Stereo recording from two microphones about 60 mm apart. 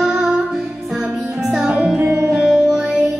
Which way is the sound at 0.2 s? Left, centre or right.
Centre.